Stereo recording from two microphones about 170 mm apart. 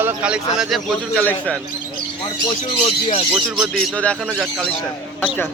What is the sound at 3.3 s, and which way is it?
Speech, centre (ahead or behind).